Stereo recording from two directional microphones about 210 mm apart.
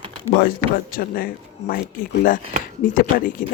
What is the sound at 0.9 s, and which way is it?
Speech, 45° left (ahead or behind).